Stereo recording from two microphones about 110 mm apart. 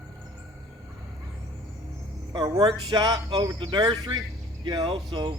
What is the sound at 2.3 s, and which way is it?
A man's voice, 35° right (ahead or behind).